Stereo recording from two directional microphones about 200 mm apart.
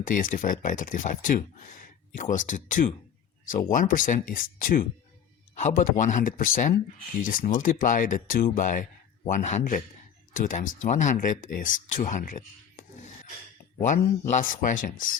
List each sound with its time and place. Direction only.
0.0 s speech: 40° left (ahead or behind)
13.8 s speech: 40° left (ahead or behind)